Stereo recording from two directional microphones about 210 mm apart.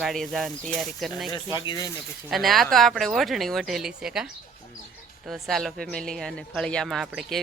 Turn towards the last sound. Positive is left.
turn(degrees=0)  # may be behind; listen again after turning